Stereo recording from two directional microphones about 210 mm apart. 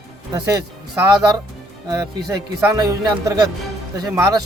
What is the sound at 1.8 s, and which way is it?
Speech, 20° right (ahead or behind).